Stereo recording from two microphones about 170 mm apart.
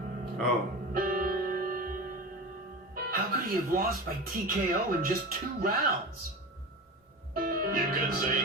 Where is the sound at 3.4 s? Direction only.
60° right (ahead or behind).